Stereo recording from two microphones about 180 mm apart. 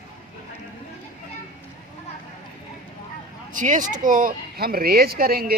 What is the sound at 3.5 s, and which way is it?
Speech, 45° right (ahead or behind).